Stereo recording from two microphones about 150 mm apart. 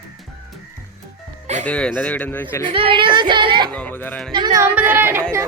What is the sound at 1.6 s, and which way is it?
Speech, 10° left (ahead or behind).